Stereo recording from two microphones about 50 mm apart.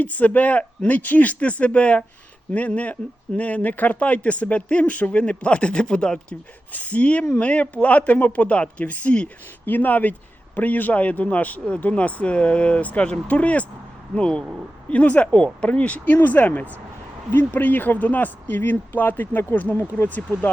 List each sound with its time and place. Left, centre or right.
0.0 s a man's voice: left; by 6.1 s centre
6.7 s a man's voice: left